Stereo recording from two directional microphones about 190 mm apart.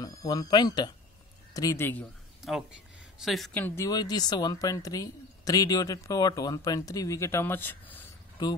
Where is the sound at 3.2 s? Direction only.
Centre (ahead or behind).